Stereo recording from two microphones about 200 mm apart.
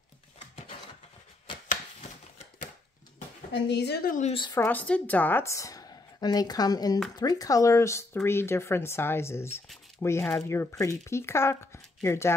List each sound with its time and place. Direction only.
3.5 s speech: 60° left (ahead or behind)
4.3 s speech: 25° left (ahead or behind)
4.6 s speech: 10° left (ahead or behind)